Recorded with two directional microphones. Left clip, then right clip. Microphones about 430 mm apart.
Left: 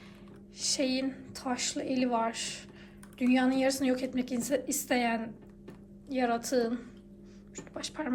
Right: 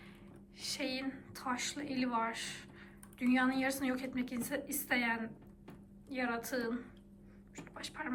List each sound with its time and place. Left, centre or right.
0.6 s a woman's voice: centre